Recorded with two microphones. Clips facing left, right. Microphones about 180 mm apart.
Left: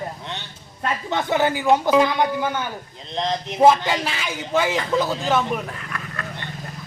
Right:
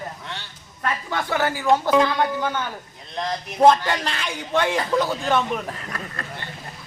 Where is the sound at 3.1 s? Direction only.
20° left (ahead or behind).